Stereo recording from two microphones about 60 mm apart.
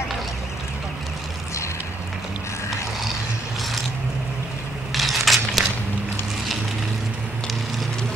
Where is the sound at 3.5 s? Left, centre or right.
Centre.